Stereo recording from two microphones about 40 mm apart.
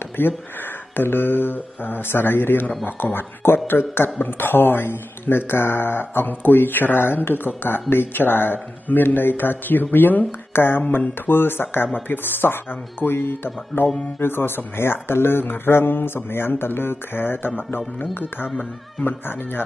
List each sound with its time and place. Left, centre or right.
0.2 s speech: left
19.0 s speech: left